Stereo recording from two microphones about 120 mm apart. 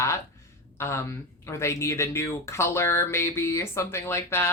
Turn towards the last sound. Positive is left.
turn(degrees=20)  # may be behind; listen again after turning